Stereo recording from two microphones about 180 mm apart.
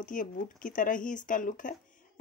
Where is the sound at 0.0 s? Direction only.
45° left (ahead or behind).